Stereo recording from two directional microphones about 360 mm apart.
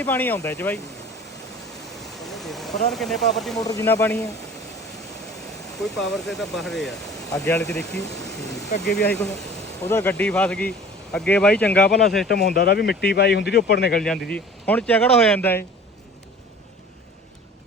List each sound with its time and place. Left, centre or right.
0.0 s speech: centre
2.2 s a sound: centre
2.9 s speech: centre
5.8 s speech: centre
8.4 s vehicle: centre
8.9 s speech: left
9.8 s speech: centre
12.3 s speech: left
14.0 s speech: centre